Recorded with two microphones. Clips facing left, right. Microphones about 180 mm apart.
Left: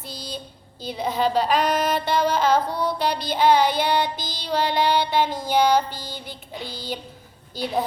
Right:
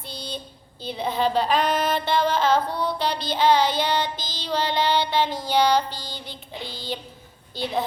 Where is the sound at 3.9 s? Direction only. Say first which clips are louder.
Left 3 dB; 15° left (ahead or behind).